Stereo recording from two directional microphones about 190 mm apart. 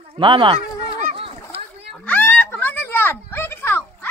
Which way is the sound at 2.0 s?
10° left (ahead or behind).